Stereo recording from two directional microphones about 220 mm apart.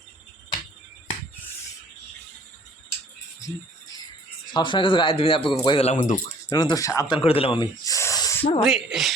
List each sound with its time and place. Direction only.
3.4 s a sound: 15° left (ahead or behind)
4.5 s a man's voice: 20° left (ahead or behind)
6.5 s speech: 15° left (ahead or behind)
8.6 s speech: centre (ahead or behind)